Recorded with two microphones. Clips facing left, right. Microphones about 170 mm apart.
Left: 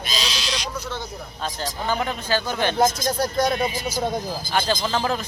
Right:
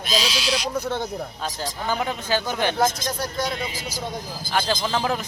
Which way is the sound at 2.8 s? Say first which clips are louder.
Left 3 dB; 40° left (ahead or behind).